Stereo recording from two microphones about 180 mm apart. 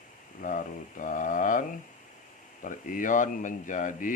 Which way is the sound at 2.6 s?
45° left (ahead or behind).